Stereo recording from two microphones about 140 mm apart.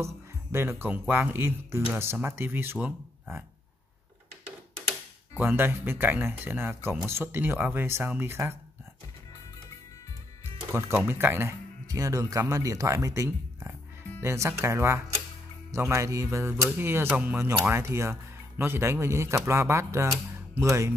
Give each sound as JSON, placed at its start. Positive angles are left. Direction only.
{"t": 0.0, "sound": "speech", "side_deg": -20}
{"t": 5.4, "sound": "speech", "side_deg": -15}
{"t": 10.7, "sound": "speech", "side_deg": -15}